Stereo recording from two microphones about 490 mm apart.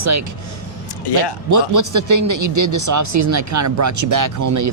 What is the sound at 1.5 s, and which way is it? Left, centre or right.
Speech, right.